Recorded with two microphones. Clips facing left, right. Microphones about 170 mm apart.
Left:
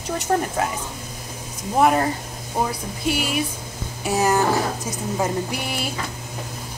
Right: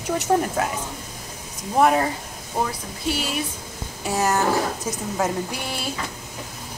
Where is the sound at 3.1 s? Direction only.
15° left (ahead or behind).